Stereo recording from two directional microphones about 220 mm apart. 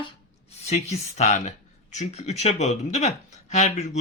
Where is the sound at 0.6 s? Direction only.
30° left (ahead or behind).